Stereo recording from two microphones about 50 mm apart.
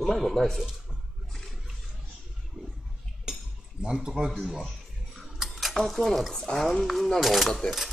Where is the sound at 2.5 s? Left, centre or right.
Right.